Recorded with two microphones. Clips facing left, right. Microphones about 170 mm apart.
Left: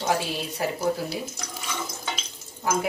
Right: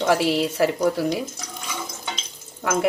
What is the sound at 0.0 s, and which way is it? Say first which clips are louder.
Speech: right 7 dB; 75° right (ahead or behind).